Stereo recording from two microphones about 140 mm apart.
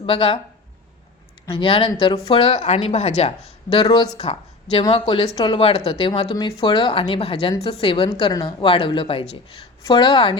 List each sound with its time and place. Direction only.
0.0 s a woman's voice: 40° left (ahead or behind)
1.5 s a woman's voice: 40° left (ahead or behind)